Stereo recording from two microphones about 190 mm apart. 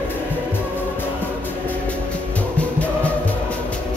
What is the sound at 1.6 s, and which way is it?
Music, 5° left (ahead or behind).